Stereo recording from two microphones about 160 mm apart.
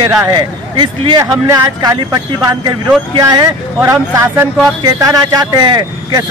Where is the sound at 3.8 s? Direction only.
15° right (ahead or behind).